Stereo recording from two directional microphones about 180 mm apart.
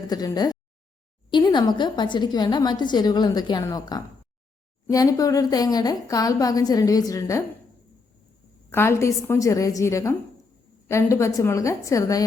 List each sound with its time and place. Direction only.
0.1 s a woman's voice: 20° left (ahead or behind)
8.7 s a woman's voice: 15° left (ahead or behind)